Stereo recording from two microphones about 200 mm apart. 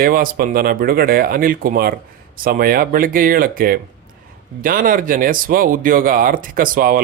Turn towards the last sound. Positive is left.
turn(degrees=-45)  # may be behind; listen again after turning